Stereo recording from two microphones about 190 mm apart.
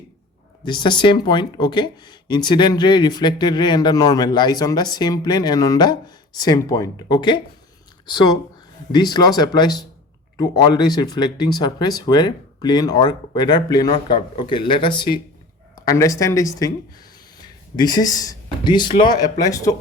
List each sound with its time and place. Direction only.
0.6 s speech: 25° left (ahead or behind)
17.7 s speech: 20° left (ahead or behind)